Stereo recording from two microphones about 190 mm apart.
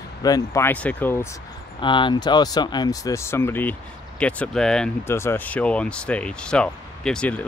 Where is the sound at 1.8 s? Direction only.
25° left (ahead or behind).